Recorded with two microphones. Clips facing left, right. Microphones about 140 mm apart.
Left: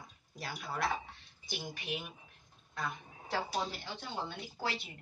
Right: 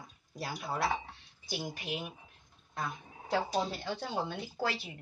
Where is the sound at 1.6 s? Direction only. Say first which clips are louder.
Right 2 dB; 40° right (ahead or behind).